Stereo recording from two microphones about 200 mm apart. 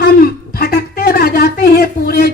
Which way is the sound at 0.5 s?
50° left (ahead or behind).